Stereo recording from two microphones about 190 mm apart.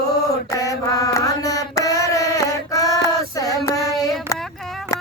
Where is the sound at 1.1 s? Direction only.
15° left (ahead or behind).